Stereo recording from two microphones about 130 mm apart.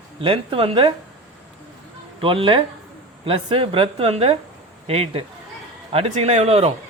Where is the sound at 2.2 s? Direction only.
45° right (ahead or behind).